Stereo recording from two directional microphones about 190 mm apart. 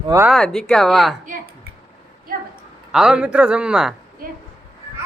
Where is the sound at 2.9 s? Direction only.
5° right (ahead or behind).